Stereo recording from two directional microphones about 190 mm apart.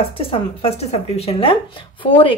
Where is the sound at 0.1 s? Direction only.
30° left (ahead or behind).